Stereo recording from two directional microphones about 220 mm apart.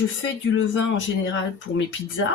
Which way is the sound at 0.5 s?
60° left (ahead or behind).